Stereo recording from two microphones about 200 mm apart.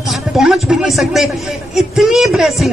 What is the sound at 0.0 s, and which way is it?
Speech, centre (ahead or behind).